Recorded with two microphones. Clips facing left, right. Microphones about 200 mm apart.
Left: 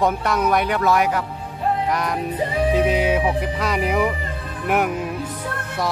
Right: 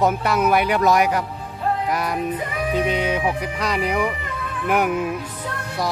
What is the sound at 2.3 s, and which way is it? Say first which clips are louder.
Music: left 5 dB; 30° left (ahead or behind).